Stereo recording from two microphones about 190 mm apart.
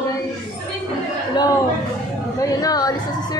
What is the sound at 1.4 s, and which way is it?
A woman's voice, 25° left (ahead or behind).